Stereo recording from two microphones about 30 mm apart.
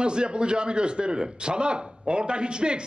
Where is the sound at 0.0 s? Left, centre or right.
Right.